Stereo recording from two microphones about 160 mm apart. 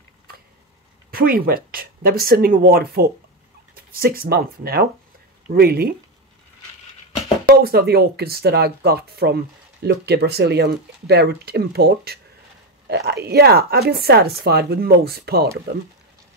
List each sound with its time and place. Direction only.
1.1 s speech: 70° right (ahead or behind)
7.4 s speech: 75° right (ahead or behind)